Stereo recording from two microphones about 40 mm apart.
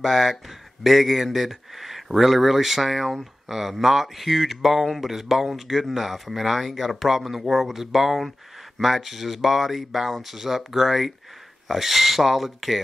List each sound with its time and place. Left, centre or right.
0.0 s speech: centre